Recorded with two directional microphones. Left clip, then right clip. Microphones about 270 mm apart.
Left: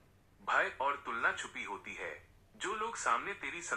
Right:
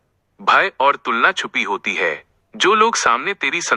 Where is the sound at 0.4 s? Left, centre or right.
Right.